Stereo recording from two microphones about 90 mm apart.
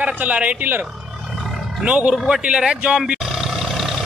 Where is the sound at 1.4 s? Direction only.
Centre (ahead or behind).